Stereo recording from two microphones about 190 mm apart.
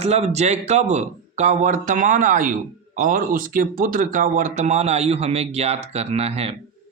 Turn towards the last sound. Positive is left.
turn(degrees=-35)  # may be behind; listen again after turning